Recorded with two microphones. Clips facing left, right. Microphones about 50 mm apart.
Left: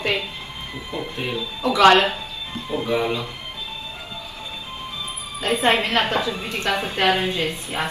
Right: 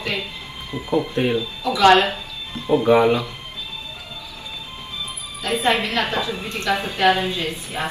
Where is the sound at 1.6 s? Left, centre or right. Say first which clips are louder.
Even; left.